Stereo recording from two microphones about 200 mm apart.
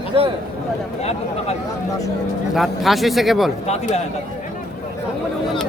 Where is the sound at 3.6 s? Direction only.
35° left (ahead or behind).